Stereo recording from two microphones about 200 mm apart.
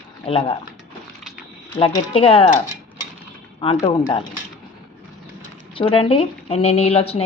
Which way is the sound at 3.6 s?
25° left (ahead or behind).